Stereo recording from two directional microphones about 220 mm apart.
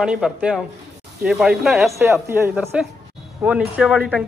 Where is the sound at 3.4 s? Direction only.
5° right (ahead or behind).